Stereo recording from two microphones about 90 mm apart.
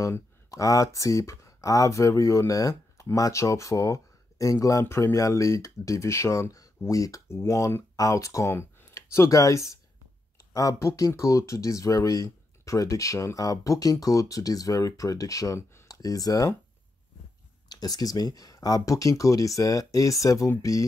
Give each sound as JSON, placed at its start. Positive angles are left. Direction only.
{"t": 0.5, "sound": "speech", "side_deg": 40}
{"t": 17.6, "sound": "speech", "side_deg": 45}